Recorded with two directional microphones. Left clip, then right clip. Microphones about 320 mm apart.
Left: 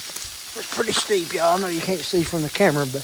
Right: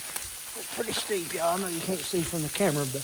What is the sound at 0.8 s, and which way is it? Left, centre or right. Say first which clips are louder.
Speech: left 9 dB; centre.